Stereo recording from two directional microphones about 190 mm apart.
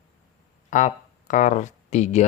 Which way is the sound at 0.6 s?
40° left (ahead or behind).